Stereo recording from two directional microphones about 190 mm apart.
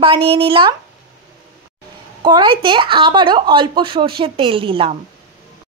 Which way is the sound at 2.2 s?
25° right (ahead or behind).